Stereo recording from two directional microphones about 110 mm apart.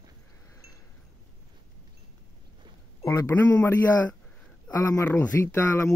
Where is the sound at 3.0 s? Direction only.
30° left (ahead or behind).